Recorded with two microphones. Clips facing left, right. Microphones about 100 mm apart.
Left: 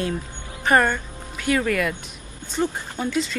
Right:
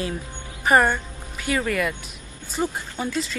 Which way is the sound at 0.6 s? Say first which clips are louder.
Right 1 dB; 15° right (ahead or behind).